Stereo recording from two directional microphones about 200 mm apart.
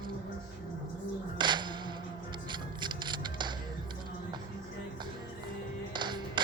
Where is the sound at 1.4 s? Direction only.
20° right (ahead or behind).